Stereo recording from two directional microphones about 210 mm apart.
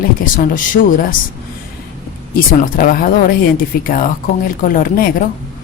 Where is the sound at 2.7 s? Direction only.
40° left (ahead or behind).